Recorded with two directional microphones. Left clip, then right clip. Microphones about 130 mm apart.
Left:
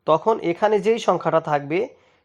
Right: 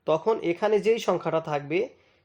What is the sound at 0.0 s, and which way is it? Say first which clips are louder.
Speech: left 5 dB; 35° left (ahead or behind).